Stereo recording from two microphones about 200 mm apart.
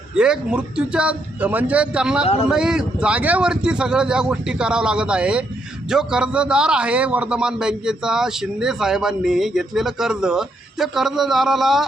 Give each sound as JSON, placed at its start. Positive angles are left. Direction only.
{"t": 0.2, "sound": "a man's voice", "side_deg": -5}
{"t": 2.2, "sound": "a man's voice", "side_deg": 30}
{"t": 2.5, "sound": "a man's voice", "side_deg": -5}